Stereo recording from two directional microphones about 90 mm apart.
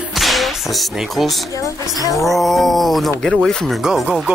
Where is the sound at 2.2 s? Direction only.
Centre (ahead or behind).